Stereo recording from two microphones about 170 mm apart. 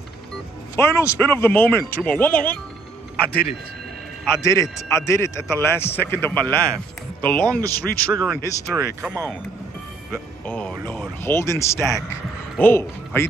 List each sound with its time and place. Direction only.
0.7 s speech: 15° left (ahead or behind)
4.4 s speech: 20° left (ahead or behind)
7.6 s a man's voice: 20° right (ahead or behind)
10.4 s speech: 5° left (ahead or behind)